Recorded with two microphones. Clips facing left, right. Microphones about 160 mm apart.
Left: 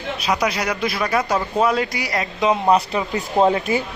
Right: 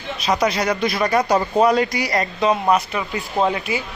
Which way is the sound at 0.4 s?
10° left (ahead or behind).